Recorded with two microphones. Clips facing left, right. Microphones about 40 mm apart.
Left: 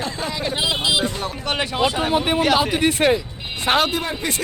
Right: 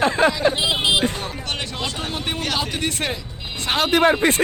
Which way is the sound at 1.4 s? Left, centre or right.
Centre.